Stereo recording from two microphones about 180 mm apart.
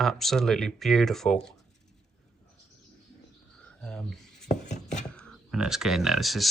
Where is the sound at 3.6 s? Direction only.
5° left (ahead or behind).